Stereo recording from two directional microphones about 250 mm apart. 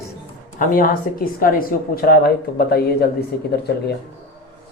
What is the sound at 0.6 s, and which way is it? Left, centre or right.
Speech, left.